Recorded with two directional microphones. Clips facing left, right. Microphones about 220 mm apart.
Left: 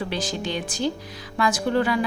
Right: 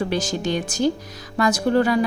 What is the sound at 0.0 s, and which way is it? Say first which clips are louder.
A woman's voice: right 5 dB; 45° right (ahead or behind).